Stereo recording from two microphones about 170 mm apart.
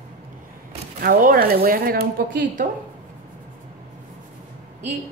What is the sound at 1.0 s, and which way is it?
Speech, 55° right (ahead or behind).